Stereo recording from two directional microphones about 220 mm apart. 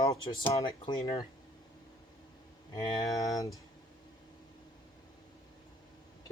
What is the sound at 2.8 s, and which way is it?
Speech, 15° left (ahead or behind).